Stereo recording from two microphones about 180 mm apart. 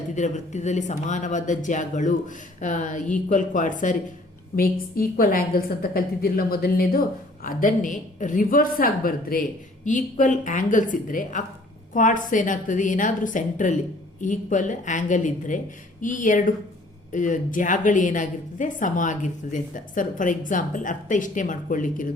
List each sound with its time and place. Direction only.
0.2 s a woman's voice: 40° left (ahead or behind)